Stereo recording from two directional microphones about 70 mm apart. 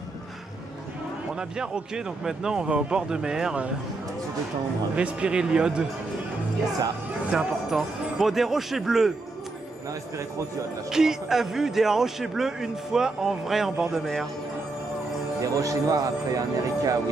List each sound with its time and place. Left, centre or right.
1.6 s speech: centre
4.9 s speech: centre
7.2 s a man's voice: centre
10.9 s a man's voice: centre
15.4 s speech: right